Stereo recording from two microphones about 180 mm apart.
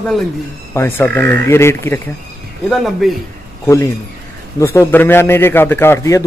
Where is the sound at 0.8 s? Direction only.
10° left (ahead or behind).